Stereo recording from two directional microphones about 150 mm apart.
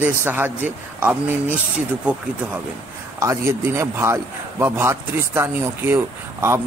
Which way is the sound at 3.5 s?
15° right (ahead or behind).